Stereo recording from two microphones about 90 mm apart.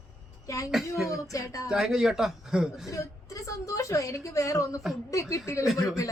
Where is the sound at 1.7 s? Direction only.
5° right (ahead or behind).